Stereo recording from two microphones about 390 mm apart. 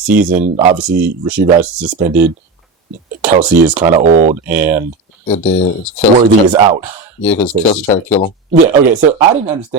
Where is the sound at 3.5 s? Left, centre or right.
Centre.